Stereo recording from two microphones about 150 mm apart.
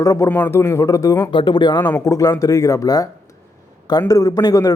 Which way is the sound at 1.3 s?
30° left (ahead or behind).